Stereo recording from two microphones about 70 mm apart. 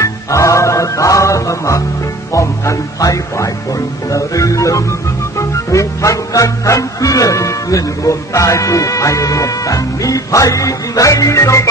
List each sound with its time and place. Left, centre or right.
0.0 s music: left